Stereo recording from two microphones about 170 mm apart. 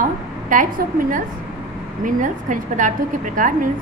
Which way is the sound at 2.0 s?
50° right (ahead or behind).